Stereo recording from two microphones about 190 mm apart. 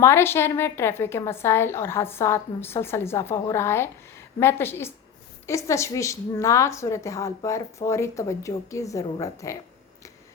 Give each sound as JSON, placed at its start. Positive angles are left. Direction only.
{"t": 0.0, "sound": "a woman's voice", "side_deg": 10}